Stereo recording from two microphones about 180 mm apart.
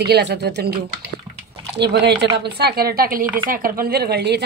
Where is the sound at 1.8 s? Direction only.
70° right (ahead or behind).